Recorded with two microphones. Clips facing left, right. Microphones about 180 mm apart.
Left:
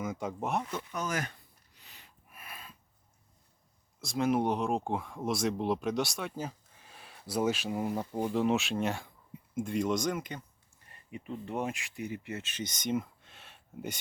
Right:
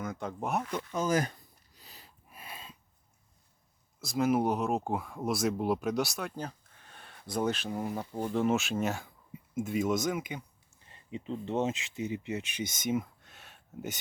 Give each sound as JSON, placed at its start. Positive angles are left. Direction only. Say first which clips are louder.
{"t": 0.0, "sound": "speech", "louder": "left 1 dB", "side_deg": 5}
{"t": 0.9, "sound": "speech", "louder": "right 7 dB", "side_deg": -35}
{"t": 1.7, "sound": "a sound", "louder": "right 3 dB", "side_deg": -35}
{"t": 4.0, "sound": "speech", "louder": "right 1 dB", "side_deg": -5}
{"t": 10.8, "sound": "speech", "louder": "right 4 dB", "side_deg": -20}